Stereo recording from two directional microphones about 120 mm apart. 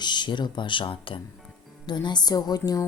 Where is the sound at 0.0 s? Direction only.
40° left (ahead or behind).